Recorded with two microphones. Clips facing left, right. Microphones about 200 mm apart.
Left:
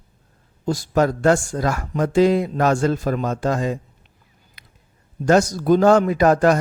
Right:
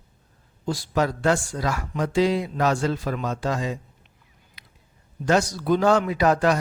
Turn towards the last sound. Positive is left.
turn(degrees=50)  # may be behind; listen again after turning